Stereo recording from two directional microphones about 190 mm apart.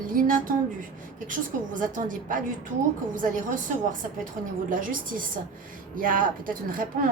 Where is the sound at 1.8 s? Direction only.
45° right (ahead or behind).